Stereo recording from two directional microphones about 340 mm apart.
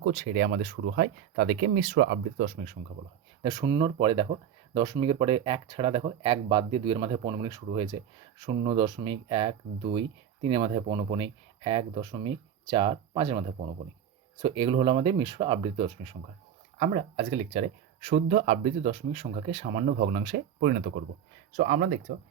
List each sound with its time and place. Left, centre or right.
0.0 s speech: right